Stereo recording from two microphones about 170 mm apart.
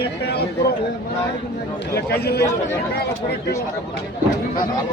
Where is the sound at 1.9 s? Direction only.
70° left (ahead or behind).